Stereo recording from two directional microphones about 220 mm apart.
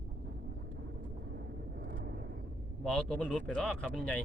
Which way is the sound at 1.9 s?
50° right (ahead or behind).